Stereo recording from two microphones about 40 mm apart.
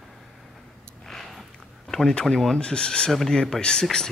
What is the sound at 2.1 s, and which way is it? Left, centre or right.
Speech, centre.